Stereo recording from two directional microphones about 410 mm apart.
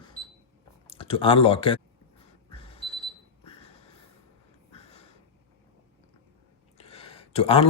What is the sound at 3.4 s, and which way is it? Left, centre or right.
Snort, centre.